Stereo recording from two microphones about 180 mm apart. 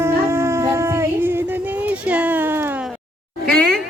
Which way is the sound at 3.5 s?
5° left (ahead or behind).